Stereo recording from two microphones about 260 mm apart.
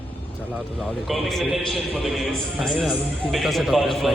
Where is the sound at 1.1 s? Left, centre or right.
Centre.